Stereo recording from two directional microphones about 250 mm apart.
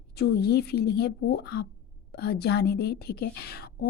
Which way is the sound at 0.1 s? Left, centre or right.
Left.